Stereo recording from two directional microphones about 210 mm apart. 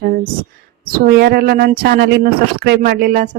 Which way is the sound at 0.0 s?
45° right (ahead or behind).